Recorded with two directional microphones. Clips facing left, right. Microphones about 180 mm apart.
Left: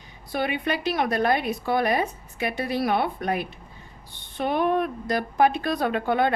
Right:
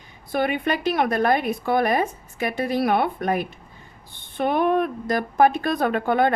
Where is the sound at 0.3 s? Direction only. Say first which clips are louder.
Right 3 dB; 50° right (ahead or behind).